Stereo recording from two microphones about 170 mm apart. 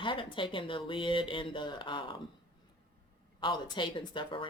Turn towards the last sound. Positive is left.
turn(degrees=30)  # may be behind; listen again after turning